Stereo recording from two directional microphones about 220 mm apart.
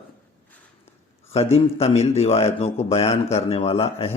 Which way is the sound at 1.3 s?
30° left (ahead or behind).